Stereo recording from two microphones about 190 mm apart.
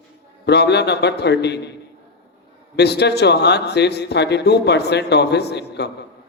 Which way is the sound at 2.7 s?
60° left (ahead or behind).